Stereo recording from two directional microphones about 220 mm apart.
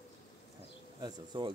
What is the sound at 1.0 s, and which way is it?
Speech, 20° right (ahead or behind).